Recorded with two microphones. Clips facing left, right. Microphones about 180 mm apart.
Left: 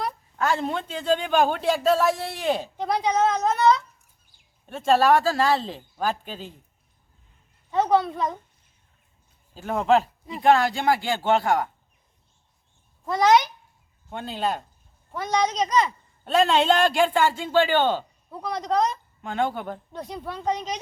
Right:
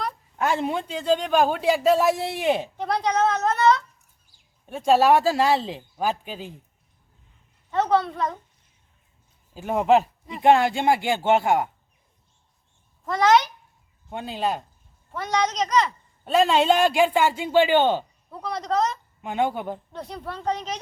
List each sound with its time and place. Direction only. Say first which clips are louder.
0.3 s a man's voice: right 1 dB; 15° right (ahead or behind)
2.0 s a man's voice: right 2 dB; 15° right (ahead or behind)
2.8 s speech: left 1 dB; 10° left (ahead or behind)
4.9 s a man's voice: right 1 dB; 15° right (ahead or behind)
7.7 s a woman's voice: left 1 dB; centre (ahead or behind)
9.6 s a man's voice: right 2 dB; 10° right (ahead or behind)
13.1 s a child's voice: even; 20° left (ahead or behind)
14.1 s a man's voice: right 1 dB; 5° right (ahead or behind)
18.3 s a man's voice: left 1 dB; centre (ahead or behind)
19.2 s a man's voice: right 2 dB; 10° right (ahead or behind)
19.9 s speech: left 1 dB; 10° left (ahead or behind)